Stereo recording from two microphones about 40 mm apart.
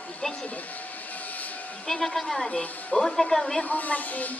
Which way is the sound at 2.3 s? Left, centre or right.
Left.